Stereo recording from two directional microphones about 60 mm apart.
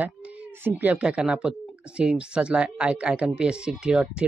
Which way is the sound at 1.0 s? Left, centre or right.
Centre.